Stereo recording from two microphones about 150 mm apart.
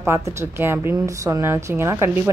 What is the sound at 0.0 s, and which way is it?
A woman's voice, 15° right (ahead or behind).